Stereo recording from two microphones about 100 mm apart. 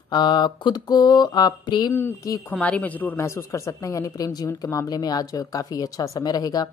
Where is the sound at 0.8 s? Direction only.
40° left (ahead or behind).